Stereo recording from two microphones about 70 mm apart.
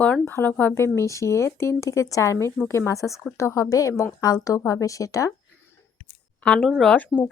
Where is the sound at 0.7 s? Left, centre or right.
Left.